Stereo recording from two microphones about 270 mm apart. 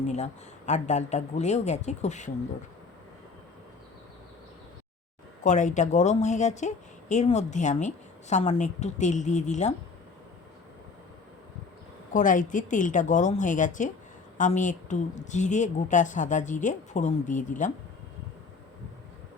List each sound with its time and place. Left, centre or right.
0.0 s a woman's voice: left
5.4 s a woman's voice: left
12.1 s a woman's voice: left